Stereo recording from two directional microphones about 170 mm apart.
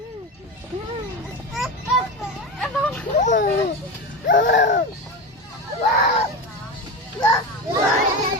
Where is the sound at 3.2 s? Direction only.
45° left (ahead or behind).